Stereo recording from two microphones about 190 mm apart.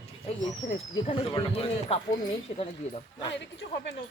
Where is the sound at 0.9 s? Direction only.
25° left (ahead or behind).